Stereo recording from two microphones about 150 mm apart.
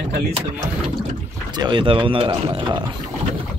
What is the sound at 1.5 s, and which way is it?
Speech, 30° right (ahead or behind).